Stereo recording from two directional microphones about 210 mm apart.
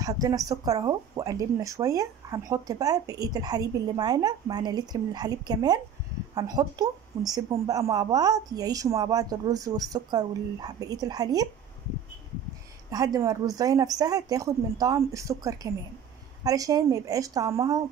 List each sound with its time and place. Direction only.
0.0 s speech: 15° right (ahead or behind)
12.9 s speech: 15° right (ahead or behind)